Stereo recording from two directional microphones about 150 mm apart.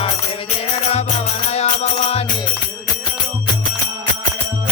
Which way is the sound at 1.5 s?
45° left (ahead or behind).